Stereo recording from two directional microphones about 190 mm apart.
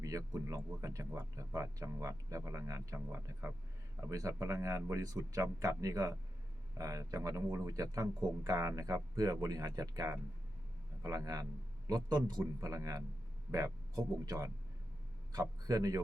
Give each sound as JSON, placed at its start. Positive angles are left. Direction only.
{"t": 0.0, "sound": "a man's voice", "side_deg": -15}